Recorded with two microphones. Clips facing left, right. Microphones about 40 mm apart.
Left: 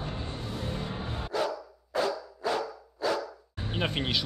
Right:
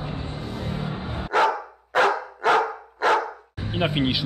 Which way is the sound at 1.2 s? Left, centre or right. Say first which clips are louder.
Right 11 dB; right.